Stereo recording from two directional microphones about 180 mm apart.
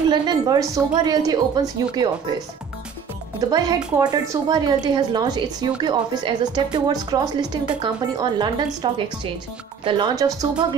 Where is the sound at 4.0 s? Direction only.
20° right (ahead or behind).